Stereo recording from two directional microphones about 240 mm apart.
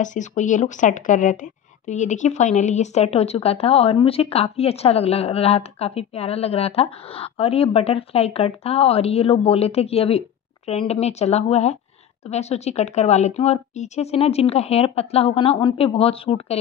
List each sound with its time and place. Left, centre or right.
0.0 s a woman's voice: left